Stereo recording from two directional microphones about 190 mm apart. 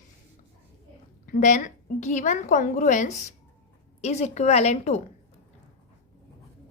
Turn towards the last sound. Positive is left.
turn(degrees=35)  # may be behind; listen again after turning